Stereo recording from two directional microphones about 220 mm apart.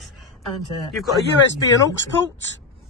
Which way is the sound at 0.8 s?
Centre (ahead or behind).